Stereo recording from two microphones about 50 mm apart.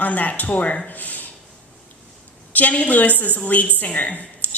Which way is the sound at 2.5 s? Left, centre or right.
Left.